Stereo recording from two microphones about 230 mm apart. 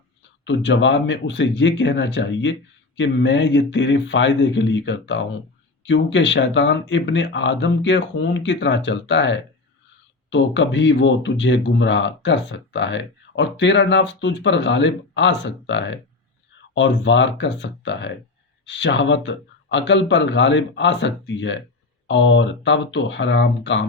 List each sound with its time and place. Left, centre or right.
0.4 s speech: left